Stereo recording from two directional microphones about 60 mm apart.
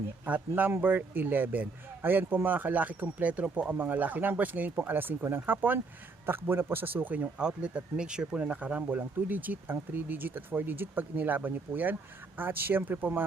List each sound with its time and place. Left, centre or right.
0.3 s speech: right
7.3 s speech: centre; by 13.2 s right